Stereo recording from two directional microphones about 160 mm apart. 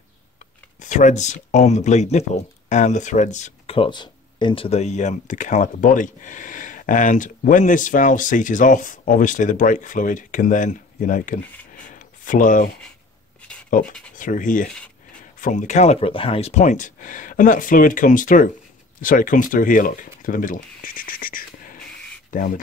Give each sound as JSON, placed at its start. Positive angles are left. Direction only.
{"t": 0.7, "sound": "speech", "side_deg": 50}
{"t": 11.7, "sound": "a sound", "side_deg": 55}
{"t": 13.7, "sound": "speech", "side_deg": 60}